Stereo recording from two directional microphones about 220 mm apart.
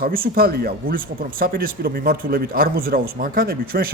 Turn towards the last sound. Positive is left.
turn(degrees=-40)  # may be behind; listen again after turning